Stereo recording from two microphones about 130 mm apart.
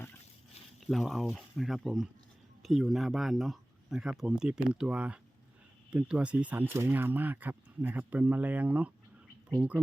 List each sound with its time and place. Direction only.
0.9 s speech: centre (ahead or behind)